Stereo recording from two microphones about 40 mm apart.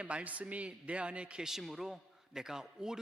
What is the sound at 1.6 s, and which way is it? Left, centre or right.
A man's voice, centre.